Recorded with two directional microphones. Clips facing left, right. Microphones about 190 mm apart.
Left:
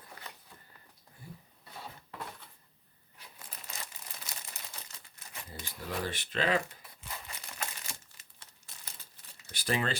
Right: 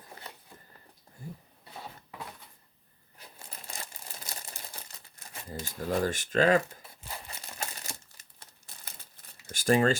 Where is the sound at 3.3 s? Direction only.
30° right (ahead or behind).